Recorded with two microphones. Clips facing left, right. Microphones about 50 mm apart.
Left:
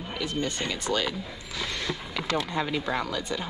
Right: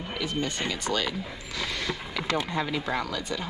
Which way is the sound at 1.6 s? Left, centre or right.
Centre.